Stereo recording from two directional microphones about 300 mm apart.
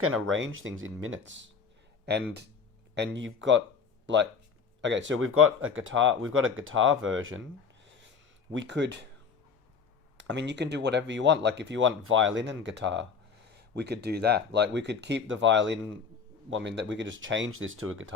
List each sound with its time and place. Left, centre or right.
0.0 s speech: right
8.5 s speech: right
10.2 s speech: right